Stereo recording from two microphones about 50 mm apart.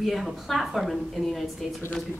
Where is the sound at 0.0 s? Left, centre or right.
Centre.